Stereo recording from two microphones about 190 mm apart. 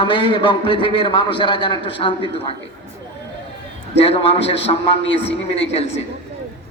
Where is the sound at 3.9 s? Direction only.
30° left (ahead or behind).